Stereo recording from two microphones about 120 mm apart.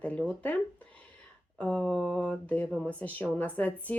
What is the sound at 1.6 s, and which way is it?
Speech, 10° left (ahead or behind).